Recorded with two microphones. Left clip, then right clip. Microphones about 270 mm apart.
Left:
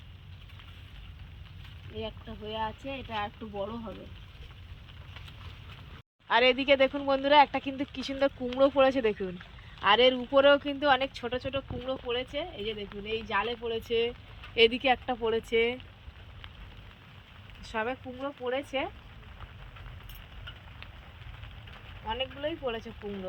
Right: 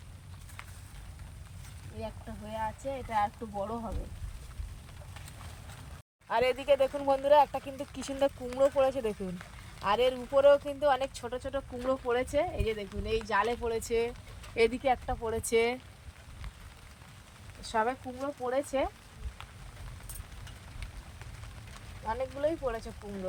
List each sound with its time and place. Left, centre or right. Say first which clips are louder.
2.0 s speech: right 1 dB; right
6.2 s speech: left 4 dB; right; by 13.7 s centre
14.5 s speech: left 3 dB; right
17.7 s speech: right 3 dB; right
22.0 s speech: right 2 dB; right